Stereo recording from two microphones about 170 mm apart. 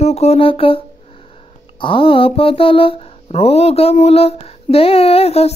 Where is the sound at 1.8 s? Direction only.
30° left (ahead or behind).